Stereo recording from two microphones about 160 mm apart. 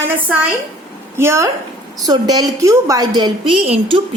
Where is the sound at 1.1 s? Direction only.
15° right (ahead or behind).